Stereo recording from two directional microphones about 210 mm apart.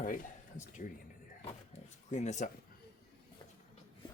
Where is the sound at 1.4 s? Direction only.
35° left (ahead or behind).